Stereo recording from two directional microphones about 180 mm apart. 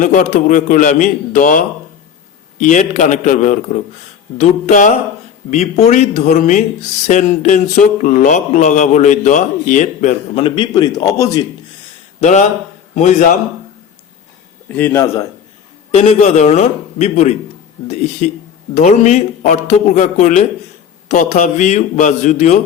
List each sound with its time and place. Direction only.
0.0 s a man's voice: 45° left (ahead or behind); by 11.4 s 20° left (ahead or behind)
12.2 s a man's voice: 40° left (ahead or behind)
14.8 s a man's voice: 10° left (ahead or behind)
15.9 s a man's voice: 35° left (ahead or behind)